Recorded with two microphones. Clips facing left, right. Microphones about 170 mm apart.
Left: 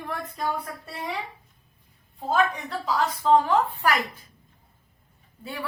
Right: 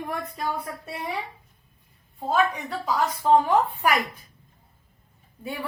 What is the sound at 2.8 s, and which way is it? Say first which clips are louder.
A woman's voice: even; 15° right (ahead or behind).